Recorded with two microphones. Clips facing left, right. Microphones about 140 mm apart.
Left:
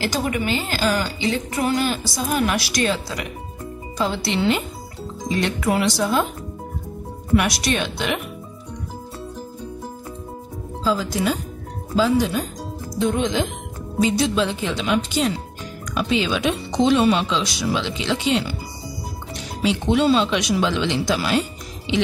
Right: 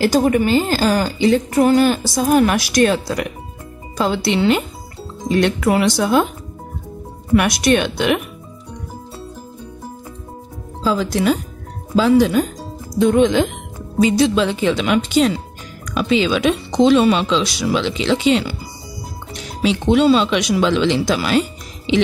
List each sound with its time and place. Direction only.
0.0 s a woman's voice: 40° right (ahead or behind); by 6.2 s 60° right (ahead or behind)
7.3 s speech: 55° right (ahead or behind)
10.8 s speech: 70° right (ahead or behind)
14.0 s speech: 90° right
19.6 s speech: 90° right